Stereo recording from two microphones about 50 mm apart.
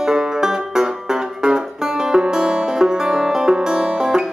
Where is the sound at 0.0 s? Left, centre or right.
Centre.